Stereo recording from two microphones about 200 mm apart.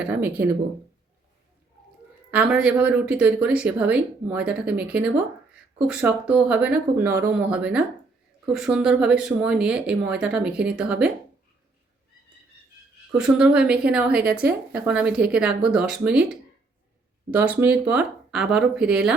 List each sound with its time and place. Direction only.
0.0 s speech: 10° right (ahead or behind)
2.3 s speech: 5° right (ahead or behind)
13.1 s speech: 5° right (ahead or behind)